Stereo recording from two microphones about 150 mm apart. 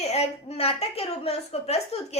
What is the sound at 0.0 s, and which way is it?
A woman's voice, 45° left (ahead or behind).